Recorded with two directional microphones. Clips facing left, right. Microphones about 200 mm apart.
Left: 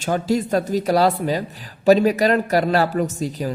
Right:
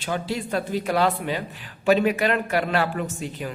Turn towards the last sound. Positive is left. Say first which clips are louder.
# left 7 dB
turn(degrees=40)  # may be behind; listen again after turning